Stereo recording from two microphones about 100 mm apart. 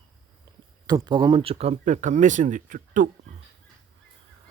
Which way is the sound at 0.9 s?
45° right (ahead or behind).